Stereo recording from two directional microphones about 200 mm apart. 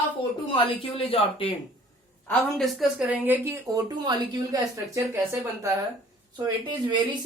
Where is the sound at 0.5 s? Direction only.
25° left (ahead or behind).